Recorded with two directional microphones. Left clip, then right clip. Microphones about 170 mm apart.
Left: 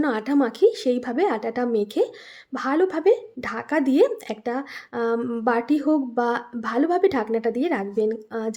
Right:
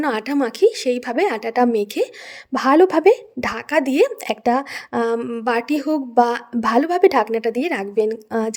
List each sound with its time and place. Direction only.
0.0 s a woman's voice: 50° right (ahead or behind)